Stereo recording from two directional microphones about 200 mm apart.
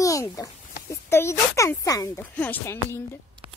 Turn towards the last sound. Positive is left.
turn(degrees=10)  # may be behind; listen again after turning